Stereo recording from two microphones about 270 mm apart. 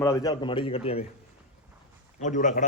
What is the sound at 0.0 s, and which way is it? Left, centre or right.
Speech, centre.